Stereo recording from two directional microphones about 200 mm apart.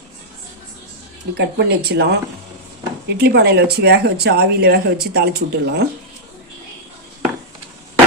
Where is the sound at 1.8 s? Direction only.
55° right (ahead or behind).